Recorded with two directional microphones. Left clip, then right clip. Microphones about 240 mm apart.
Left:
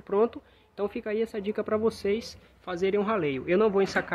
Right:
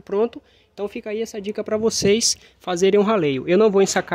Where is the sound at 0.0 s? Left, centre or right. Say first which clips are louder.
Right 4 dB; right.